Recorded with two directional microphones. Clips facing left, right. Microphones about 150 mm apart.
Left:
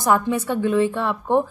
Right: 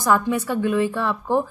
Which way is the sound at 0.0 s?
25° left (ahead or behind).